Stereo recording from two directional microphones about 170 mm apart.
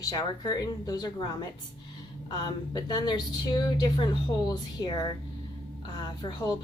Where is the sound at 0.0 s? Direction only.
20° left (ahead or behind).